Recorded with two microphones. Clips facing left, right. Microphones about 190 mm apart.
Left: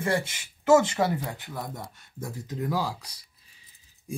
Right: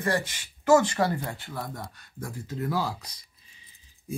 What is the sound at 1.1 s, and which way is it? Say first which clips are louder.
Speech: left 1 dB; 5° left (ahead or behind).